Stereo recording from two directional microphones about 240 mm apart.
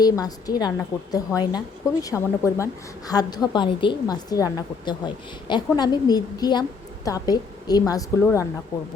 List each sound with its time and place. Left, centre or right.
0.0 s a woman's voice: centre